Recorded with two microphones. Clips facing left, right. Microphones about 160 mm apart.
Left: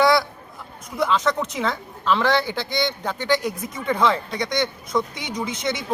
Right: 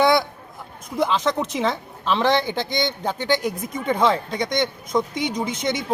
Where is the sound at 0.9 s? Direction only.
20° right (ahead or behind).